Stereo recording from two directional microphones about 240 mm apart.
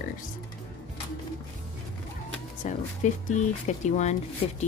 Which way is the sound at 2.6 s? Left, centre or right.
Left.